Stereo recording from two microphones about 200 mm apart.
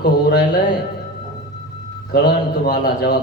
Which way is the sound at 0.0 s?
50° left (ahead or behind).